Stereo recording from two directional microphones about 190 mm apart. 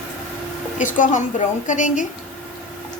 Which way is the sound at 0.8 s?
45° left (ahead or behind).